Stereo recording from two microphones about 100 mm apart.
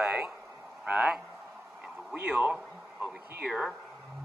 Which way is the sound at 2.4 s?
15° right (ahead or behind).